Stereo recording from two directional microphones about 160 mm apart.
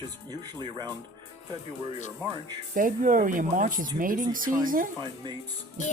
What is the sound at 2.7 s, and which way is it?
Speech, 60° right (ahead or behind).